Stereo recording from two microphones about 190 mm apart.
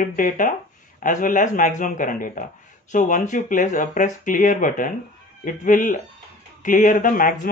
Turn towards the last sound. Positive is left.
turn(degrees=45)  # may be behind; listen again after turning